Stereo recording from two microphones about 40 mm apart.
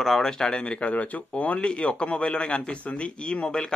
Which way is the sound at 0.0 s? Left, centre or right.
Centre.